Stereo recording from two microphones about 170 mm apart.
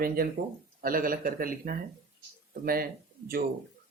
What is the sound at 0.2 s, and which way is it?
Speech, 60° right (ahead or behind).